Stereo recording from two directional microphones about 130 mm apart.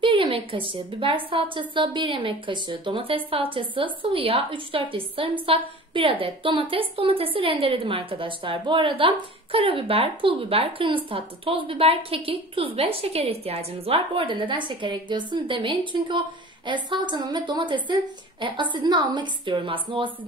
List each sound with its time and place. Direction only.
0.0 s a woman's voice: 40° right (ahead or behind)